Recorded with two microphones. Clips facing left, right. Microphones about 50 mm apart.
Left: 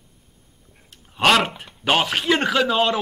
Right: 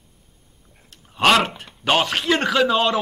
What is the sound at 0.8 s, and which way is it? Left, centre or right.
A man's voice, centre.